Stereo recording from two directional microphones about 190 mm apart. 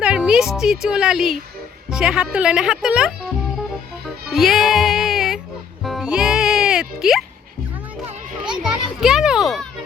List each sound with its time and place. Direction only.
0.0 s speech: 5° right (ahead or behind)
4.3 s music: centre (ahead or behind)
8.4 s children playing: 5° right (ahead or behind)